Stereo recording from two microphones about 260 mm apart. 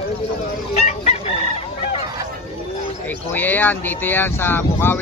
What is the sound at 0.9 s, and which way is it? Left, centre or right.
Chicken, left.